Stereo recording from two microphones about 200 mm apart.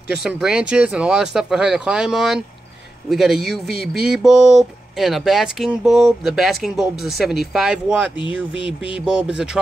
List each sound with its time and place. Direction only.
0.2 s speech: 5° right (ahead or behind)
8.5 s a sound: 25° left (ahead or behind)
8.9 s speech: 5° right (ahead or behind)